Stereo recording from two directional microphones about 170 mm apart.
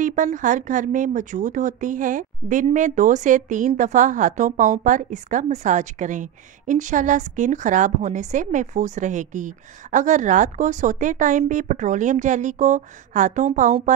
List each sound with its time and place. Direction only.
0.0 s a woman's voice: 50° right (ahead or behind)